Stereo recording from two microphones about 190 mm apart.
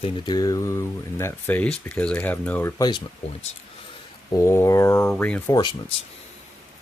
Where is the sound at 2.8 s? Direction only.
25° left (ahead or behind).